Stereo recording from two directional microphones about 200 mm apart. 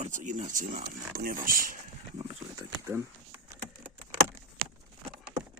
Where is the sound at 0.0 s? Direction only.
40° right (ahead or behind).